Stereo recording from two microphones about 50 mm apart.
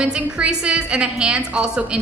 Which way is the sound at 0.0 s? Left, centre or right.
Right.